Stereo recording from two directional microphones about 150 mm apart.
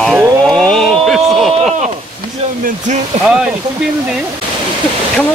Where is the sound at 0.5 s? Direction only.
5° left (ahead or behind).